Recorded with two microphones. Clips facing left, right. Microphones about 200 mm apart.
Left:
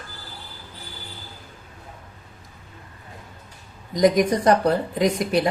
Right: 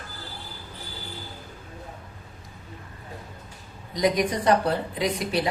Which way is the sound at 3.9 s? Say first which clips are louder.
Left 5 dB; 45° left (ahead or behind).